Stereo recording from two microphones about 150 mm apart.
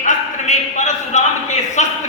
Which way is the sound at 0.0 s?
55° left (ahead or behind).